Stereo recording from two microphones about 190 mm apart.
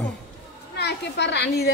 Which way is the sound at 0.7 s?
60° left (ahead or behind).